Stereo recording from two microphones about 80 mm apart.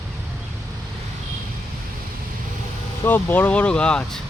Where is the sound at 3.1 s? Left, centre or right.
Left.